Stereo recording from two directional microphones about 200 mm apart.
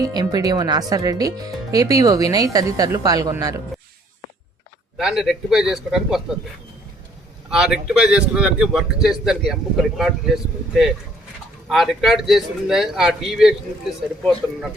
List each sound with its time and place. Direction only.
0.0 s speech: 20° right (ahead or behind)
4.9 s speech: centre (ahead or behind)
7.5 s speech: centre (ahead or behind)